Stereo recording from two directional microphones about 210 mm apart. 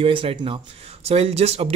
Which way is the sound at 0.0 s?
25° right (ahead or behind).